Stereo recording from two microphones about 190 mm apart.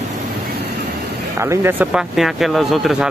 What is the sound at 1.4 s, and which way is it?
Speech, 15° right (ahead or behind).